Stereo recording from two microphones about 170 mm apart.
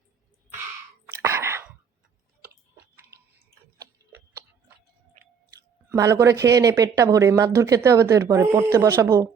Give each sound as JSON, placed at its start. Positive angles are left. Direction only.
{"t": 1.0, "sound": "whispering", "side_deg": -15}
{"t": 5.9, "sound": "speech", "side_deg": -15}